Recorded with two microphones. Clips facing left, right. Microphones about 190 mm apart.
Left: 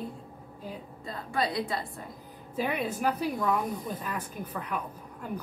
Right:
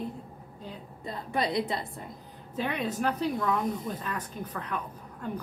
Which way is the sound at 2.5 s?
10° left (ahead or behind).